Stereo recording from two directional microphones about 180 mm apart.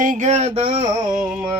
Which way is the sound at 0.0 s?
45° right (ahead or behind).